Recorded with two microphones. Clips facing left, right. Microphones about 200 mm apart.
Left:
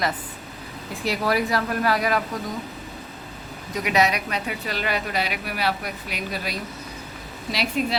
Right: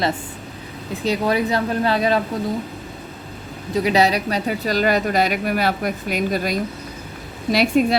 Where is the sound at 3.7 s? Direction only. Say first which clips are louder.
Right 5 dB; 30° right (ahead or behind).